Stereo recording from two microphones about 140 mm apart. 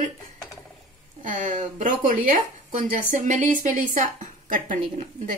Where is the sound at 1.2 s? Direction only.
65° right (ahead or behind).